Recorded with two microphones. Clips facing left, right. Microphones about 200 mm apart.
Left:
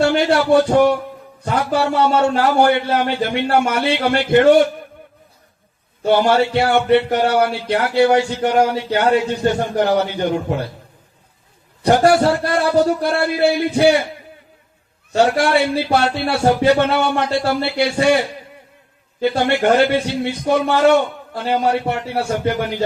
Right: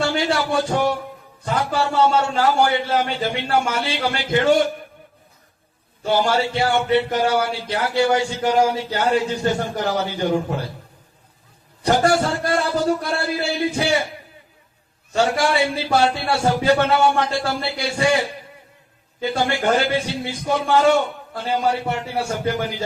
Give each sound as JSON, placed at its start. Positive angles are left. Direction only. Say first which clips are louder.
{"t": 0.0, "sound": "a man's voice", "louder": "left 6 dB", "side_deg": 60}
{"t": 6.1, "sound": "a man's voice", "louder": "left 5 dB", "side_deg": 60}
{"t": 11.8, "sound": "a man's voice", "louder": "left 5 dB", "side_deg": 60}
{"t": 15.1, "sound": "a man's voice", "louder": "left 4 dB", "side_deg": 65}
{"t": 19.2, "sound": "a man's voice", "louder": "left 5 dB", "side_deg": 60}